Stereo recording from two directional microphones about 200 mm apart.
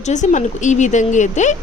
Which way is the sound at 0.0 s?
35° left (ahead or behind).